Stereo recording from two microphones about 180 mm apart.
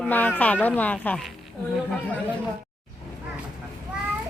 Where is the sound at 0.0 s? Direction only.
10° left (ahead or behind).